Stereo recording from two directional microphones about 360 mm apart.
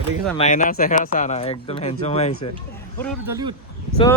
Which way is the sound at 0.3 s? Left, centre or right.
Centre.